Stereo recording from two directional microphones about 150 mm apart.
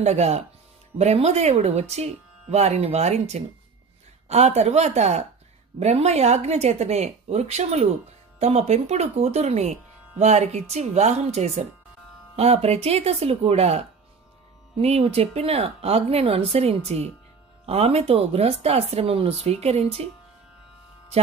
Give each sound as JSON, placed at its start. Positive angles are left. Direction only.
{"t": 0.0, "sound": "speech", "side_deg": -45}